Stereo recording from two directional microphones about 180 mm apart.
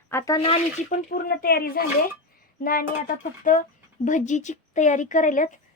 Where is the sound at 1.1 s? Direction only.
55° left (ahead or behind).